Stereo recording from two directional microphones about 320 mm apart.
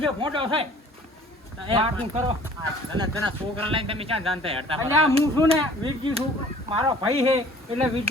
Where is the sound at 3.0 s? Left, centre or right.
Centre.